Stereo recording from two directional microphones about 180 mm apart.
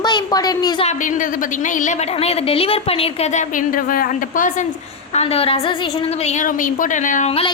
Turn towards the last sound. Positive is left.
turn(degrees=30)  # may be behind; listen again after turning